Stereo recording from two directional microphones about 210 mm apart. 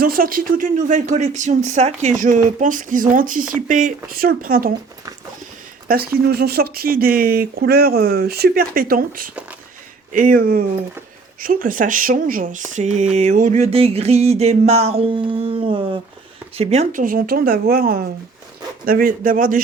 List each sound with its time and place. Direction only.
0.0 s speech: 45° right (ahead or behind)
5.9 s speech: 45° right (ahead or behind)